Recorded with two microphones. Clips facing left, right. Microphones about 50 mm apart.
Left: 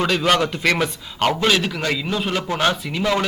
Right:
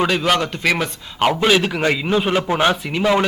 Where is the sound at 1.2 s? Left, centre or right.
Centre.